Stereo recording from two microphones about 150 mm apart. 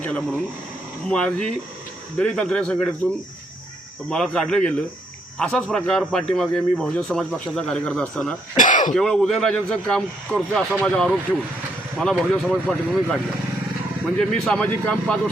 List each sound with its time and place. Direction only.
0.0 s a man's voice: 5° left (ahead or behind)
8.5 s speech: 60° left (ahead or behind)
9.0 s a man's voice: 5° left (ahead or behind)
14.2 s a man's voice: 5° left (ahead or behind)